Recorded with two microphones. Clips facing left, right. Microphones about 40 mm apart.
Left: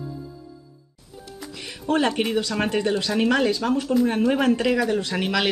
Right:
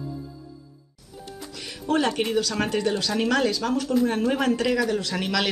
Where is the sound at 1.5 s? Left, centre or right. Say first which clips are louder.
Left 1 dB; left.